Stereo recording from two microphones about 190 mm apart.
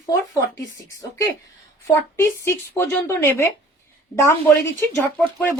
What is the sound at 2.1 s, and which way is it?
Speech, 15° left (ahead or behind).